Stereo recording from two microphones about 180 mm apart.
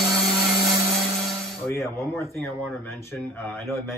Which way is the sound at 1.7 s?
15° left (ahead or behind).